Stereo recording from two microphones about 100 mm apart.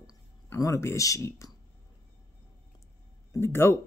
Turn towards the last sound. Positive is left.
turn(degrees=25)  # may be behind; listen again after turning